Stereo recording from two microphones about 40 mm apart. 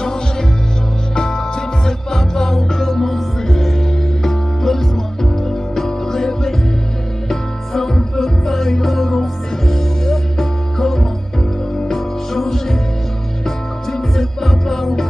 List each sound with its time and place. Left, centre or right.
0.0 s music: centre
13.9 s music: centre